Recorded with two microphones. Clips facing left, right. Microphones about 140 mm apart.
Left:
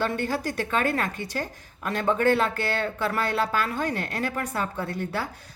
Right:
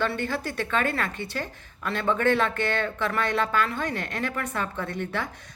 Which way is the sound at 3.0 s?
35° left (ahead or behind).